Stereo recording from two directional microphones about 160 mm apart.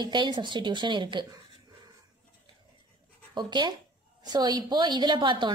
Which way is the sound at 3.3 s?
30° right (ahead or behind).